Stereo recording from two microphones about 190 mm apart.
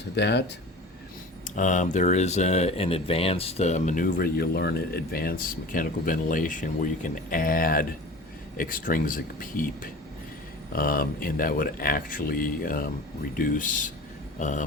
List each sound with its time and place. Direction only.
0.2 s speech: 65° left (ahead or behind)
1.5 s speech: 40° left (ahead or behind)